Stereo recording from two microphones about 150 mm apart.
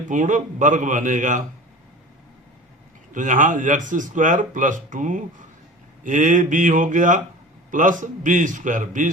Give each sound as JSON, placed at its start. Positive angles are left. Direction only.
{"t": 0.1, "sound": "speech", "side_deg": -55}
{"t": 3.1, "sound": "speech", "side_deg": -60}